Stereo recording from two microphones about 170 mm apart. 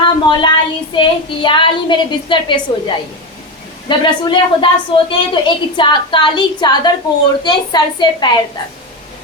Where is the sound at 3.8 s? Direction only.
30° left (ahead or behind).